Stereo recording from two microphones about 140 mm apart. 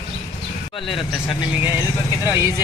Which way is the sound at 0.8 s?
40° left (ahead or behind).